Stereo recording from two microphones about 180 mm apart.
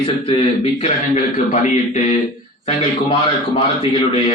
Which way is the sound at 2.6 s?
30° left (ahead or behind).